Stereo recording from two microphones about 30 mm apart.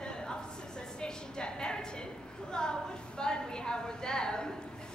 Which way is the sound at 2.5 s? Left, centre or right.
Left.